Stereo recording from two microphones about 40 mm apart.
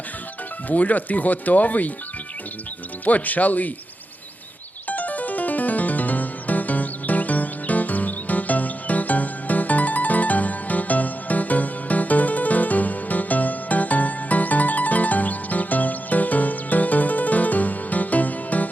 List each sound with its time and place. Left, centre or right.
0.7 s speech: left
3.0 s speech: left
4.9 s music: left